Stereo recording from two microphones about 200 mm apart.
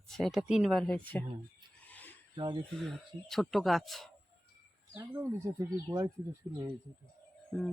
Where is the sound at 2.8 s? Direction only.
Centre (ahead or behind).